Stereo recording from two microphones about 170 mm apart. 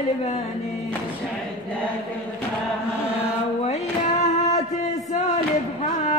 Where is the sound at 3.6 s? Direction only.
40° left (ahead or behind).